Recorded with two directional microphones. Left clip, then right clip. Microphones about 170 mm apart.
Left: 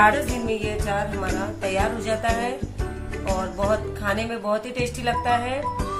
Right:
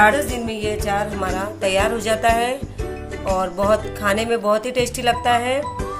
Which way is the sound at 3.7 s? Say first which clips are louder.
Right 6 dB; 60° right (ahead or behind).